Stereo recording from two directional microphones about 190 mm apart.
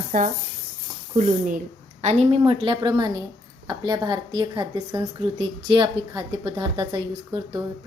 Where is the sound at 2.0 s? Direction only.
35° right (ahead or behind).